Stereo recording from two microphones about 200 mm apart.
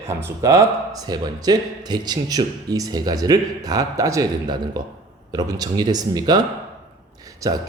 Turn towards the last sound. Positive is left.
turn(degrees=-20)  # may be behind; listen again after turning